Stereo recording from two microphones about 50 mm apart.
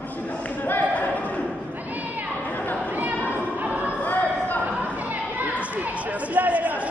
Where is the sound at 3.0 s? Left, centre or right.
Right.